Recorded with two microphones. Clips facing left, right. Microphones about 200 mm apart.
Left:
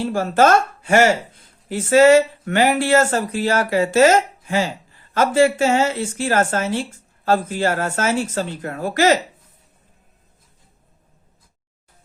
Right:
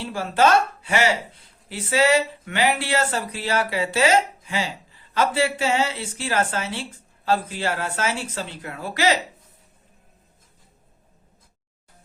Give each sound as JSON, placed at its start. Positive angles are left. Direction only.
{"t": 0.0, "sound": "speech", "side_deg": 45}